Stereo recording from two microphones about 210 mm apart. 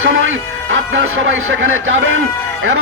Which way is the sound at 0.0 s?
65° right (ahead or behind).